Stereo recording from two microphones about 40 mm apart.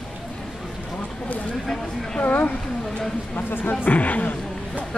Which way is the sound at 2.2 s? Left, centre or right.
Left.